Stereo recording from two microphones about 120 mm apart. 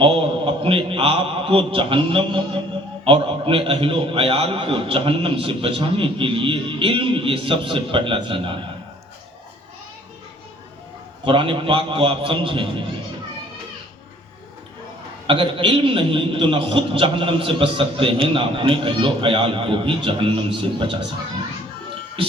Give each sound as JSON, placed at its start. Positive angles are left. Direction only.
{"t": 0.0, "sound": "a man's voice", "side_deg": -50}
{"t": 11.3, "sound": "a man's voice", "side_deg": -45}
{"t": 15.3, "sound": "a man's voice", "side_deg": -45}
{"t": 22.2, "sound": "music", "side_deg": -50}